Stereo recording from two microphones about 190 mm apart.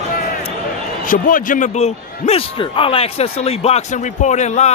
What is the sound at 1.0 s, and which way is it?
A man's voice, 45° left (ahead or behind).